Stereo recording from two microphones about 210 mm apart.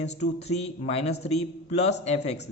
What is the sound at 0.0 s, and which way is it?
Speech, 30° left (ahead or behind).